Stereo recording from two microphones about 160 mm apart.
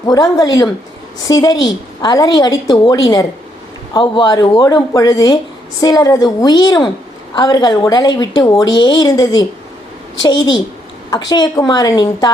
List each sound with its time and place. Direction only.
0.0 s a woman's voice: 25° left (ahead or behind)